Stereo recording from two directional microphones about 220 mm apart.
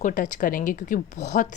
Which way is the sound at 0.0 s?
35° left (ahead or behind).